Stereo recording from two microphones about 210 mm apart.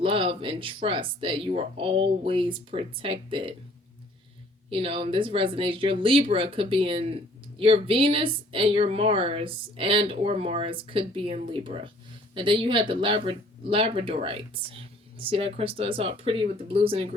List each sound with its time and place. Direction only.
0.0 s speech: 25° right (ahead or behind)
4.7 s speech: 25° right (ahead or behind)